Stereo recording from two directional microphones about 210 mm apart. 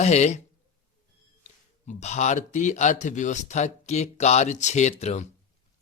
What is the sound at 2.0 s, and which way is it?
Speech, 35° left (ahead or behind).